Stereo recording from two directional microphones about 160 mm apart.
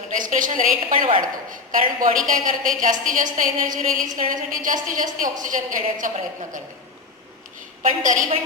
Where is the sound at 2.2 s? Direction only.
55° right (ahead or behind).